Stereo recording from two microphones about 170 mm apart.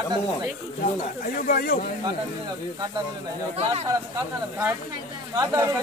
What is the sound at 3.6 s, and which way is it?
Speech, 35° right (ahead or behind).